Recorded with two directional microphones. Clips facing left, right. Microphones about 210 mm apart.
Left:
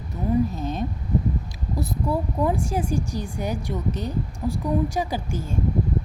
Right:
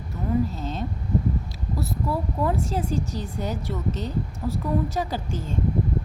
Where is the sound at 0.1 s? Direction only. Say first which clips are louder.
Left 2 dB; 15° left (ahead or behind).